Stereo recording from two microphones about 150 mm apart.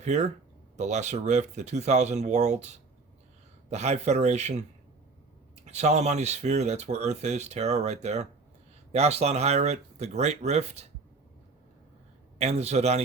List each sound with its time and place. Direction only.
0.0 s speech: 50° right (ahead or behind)
5.6 s speech: 50° right (ahead or behind)
12.4 s speech: 45° right (ahead or behind)